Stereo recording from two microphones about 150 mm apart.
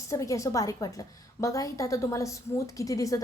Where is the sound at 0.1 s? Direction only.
20° left (ahead or behind).